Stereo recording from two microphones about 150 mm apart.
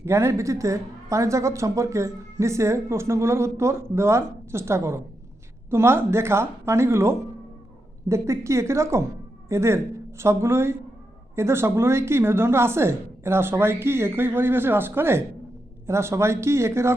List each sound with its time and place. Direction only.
0.0 s a woman's voice: 20° right (ahead or behind)